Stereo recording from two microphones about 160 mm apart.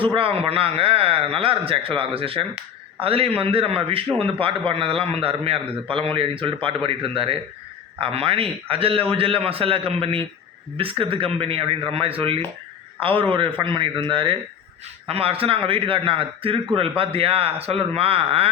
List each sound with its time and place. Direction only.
0.0 s a man's voice: 35° right (ahead or behind)